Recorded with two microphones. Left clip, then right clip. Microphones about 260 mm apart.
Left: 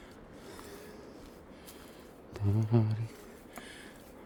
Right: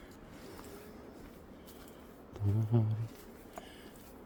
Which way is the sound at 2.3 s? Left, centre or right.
Centre.